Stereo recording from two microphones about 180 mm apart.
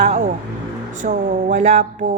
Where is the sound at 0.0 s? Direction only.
40° right (ahead or behind).